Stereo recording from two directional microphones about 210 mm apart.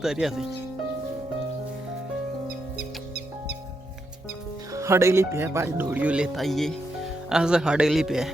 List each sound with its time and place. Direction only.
0.0 s speech: centre (ahead or behind)
2.7 s music: 50° right (ahead or behind)
4.7 s speech: 15° right (ahead or behind)